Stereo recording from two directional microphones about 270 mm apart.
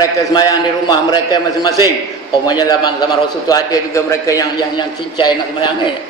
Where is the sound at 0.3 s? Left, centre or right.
Centre.